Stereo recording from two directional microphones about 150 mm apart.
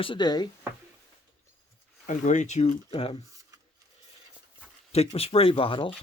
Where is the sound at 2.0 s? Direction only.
55° left (ahead or behind); by 3.1 s 40° left (ahead or behind).